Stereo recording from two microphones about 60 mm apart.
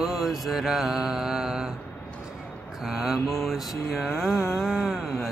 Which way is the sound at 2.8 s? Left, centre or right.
Centre.